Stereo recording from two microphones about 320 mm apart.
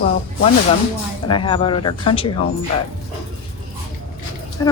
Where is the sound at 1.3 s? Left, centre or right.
Centre.